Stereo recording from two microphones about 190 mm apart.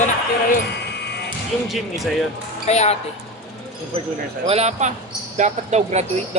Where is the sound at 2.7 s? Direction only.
35° left (ahead or behind).